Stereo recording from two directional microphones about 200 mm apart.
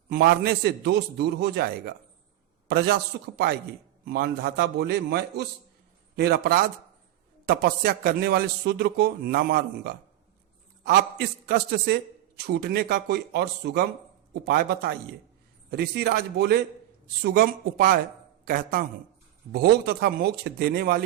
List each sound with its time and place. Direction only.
0.1 s a man's voice: 50° right (ahead or behind)